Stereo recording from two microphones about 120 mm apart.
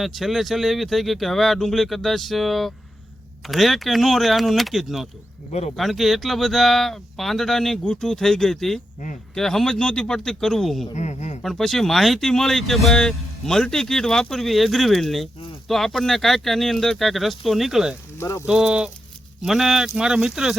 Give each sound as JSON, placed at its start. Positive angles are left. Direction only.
{"t": 0.0, "sound": "speech", "side_deg": 0}
{"t": 5.5, "sound": "speech", "side_deg": 65}
{"t": 5.7, "sound": "speech", "side_deg": 0}
{"t": 10.9, "sound": "speech", "side_deg": 75}
{"t": 11.4, "sound": "speech", "side_deg": 0}
{"t": 18.2, "sound": "speech", "side_deg": 20}
{"t": 18.4, "sound": "speech", "side_deg": -5}